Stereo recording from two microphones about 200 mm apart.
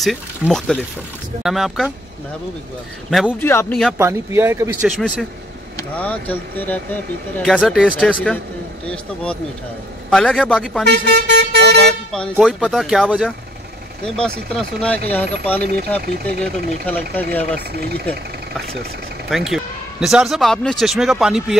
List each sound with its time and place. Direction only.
0.0 s speech: centre (ahead or behind)
3.1 s speech: centre (ahead or behind)
4.0 s speech: 15° right (ahead or behind)
4.9 s speech: centre (ahead or behind)
10.9 s vehicle: 55° right (ahead or behind)
12.1 s speech: centre (ahead or behind)
17.1 s speech: 10° left (ahead or behind)
17.7 s speech: 50° right (ahead or behind)
19.5 s a man's voice: 5° right (ahead or behind)